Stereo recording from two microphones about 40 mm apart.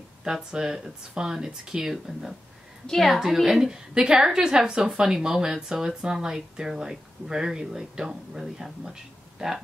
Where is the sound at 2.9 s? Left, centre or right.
Centre.